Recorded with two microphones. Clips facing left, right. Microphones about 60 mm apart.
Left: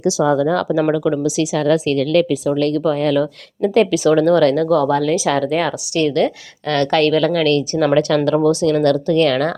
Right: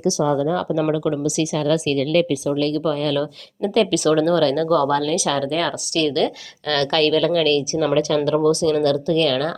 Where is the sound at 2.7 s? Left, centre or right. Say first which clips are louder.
Left 4 dB; left.